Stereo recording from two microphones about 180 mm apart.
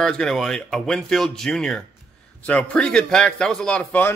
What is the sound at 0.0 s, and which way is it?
A man's voice, 5° left (ahead or behind).